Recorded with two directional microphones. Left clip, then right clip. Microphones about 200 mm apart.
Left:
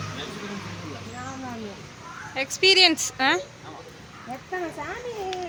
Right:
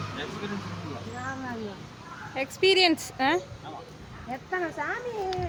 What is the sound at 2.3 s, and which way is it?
A woman's voice, 10° right (ahead or behind).